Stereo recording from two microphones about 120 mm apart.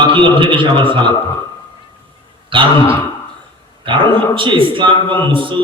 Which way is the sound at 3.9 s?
45° right (ahead or behind).